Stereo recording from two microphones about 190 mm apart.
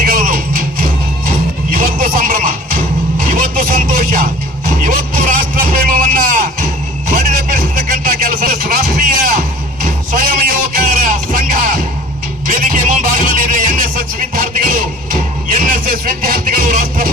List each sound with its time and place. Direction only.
0.0 s music: 50° right (ahead or behind)
3.2 s vehicle: 45° right (ahead or behind)
9.8 s music: 45° right (ahead or behind)